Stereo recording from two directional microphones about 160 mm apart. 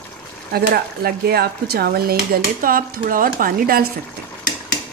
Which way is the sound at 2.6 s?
60° right (ahead or behind).